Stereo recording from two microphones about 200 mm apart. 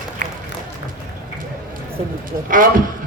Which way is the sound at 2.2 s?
45° right (ahead or behind).